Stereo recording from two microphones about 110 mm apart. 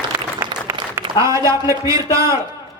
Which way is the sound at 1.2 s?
30° right (ahead or behind).